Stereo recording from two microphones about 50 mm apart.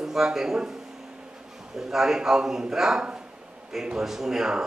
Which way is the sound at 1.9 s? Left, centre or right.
Centre.